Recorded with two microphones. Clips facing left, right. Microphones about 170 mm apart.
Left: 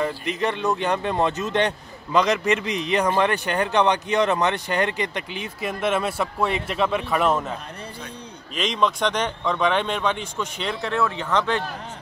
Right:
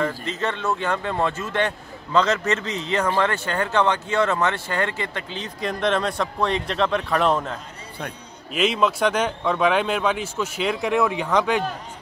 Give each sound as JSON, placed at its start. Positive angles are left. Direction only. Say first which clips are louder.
{"t": 0.0, "sound": "speech", "louder": "left 1 dB", "side_deg": 15}
{"t": 8.5, "sound": "speech", "louder": "right 2 dB", "side_deg": -5}